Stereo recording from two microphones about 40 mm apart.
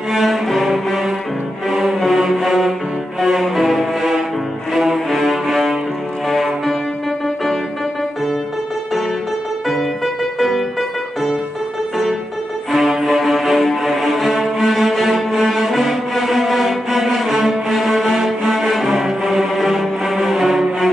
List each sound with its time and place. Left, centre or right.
0.1 s cello: centre
1.7 s music: centre
3.2 s cello: centre
6.2 s music: centre
9.7 s music: centre
12.7 s music: centre
13.1 s cello: centre